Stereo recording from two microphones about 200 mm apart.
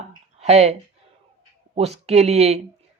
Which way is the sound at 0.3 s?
30° right (ahead or behind).